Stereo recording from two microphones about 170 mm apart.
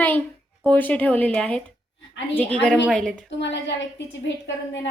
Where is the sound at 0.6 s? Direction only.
10° left (ahead or behind).